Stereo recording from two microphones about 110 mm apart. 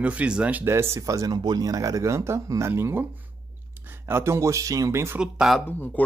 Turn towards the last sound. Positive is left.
turn(degrees=15)  # may be behind; listen again after turning